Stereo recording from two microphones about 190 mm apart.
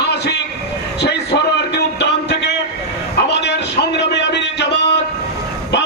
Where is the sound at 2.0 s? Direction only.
65° left (ahead or behind).